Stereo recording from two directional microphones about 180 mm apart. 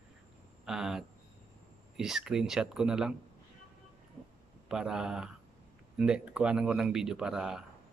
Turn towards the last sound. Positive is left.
turn(degrees=-5)  # may be behind; listen again after turning